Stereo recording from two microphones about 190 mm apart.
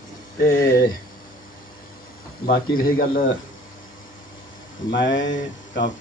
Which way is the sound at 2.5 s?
50° left (ahead or behind).